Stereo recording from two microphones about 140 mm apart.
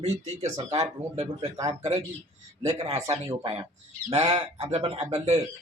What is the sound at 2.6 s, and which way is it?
Speech, 50° right (ahead or behind).